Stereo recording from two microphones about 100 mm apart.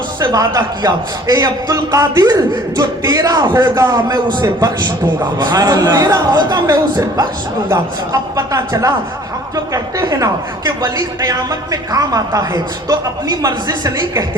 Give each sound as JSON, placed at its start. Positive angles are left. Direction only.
{"t": 0.2, "sound": "a man's voice", "side_deg": -40}
{"t": 6.3, "sound": "a man's voice", "side_deg": -45}
{"t": 8.1, "sound": "speech", "side_deg": -35}